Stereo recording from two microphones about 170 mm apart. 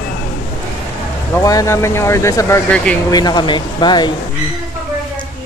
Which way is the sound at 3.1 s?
25° left (ahead or behind).